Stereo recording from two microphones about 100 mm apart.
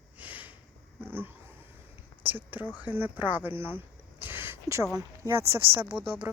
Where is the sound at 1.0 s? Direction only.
20° right (ahead or behind).